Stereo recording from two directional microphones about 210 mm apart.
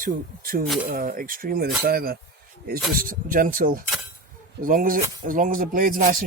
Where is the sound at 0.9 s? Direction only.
40° right (ahead or behind).